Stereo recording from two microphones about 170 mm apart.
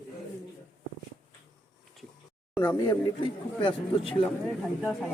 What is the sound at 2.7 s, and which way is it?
Speech, 25° left (ahead or behind).